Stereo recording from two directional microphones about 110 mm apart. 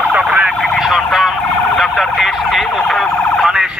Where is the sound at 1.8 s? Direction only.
Centre (ahead or behind).